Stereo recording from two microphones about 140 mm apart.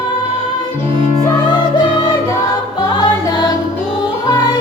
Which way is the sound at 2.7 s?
25° left (ahead or behind).